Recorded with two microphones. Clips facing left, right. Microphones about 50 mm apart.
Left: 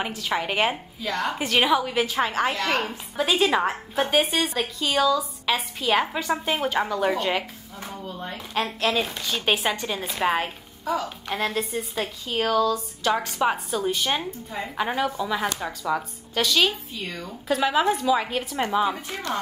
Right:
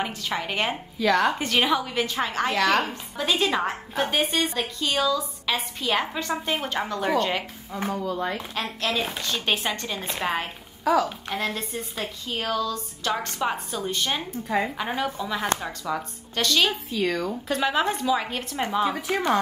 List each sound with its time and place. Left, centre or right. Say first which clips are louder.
0.0 s speech: left 2 dB; centre
0.9 s speech: right 6 dB; right
1.4 s a woman's voice: left 2 dB; centre
7.9 s speech: right 6 dB; right
8.9 s a woman's voice: left 2 dB; centre
10.8 s speech: right 5 dB; right
11.1 s a woman's voice: left 1 dB; centre
16.9 s speech: right 8 dB; right
17.5 s a woman's voice: left 4 dB; centre